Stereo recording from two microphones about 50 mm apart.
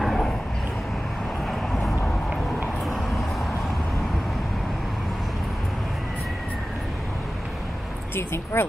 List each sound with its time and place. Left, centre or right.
8.2 s speech: left